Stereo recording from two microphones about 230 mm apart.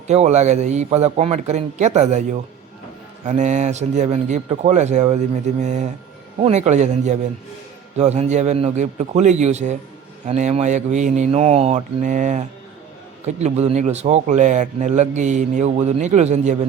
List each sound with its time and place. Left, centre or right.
0.1 s speech: right
3.2 s speech: right